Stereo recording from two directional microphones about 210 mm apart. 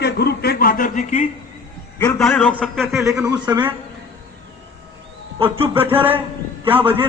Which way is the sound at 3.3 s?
20° right (ahead or behind).